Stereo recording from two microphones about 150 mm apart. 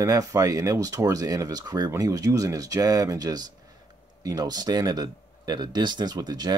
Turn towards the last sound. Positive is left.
turn(degrees=-25)  # may be behind; listen again after turning